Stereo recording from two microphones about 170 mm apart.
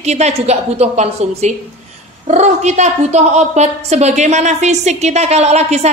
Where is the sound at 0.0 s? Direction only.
40° right (ahead or behind).